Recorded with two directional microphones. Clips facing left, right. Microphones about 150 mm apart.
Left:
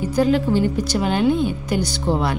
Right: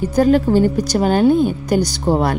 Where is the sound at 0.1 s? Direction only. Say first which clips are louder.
Right 4 dB; 45° right (ahead or behind).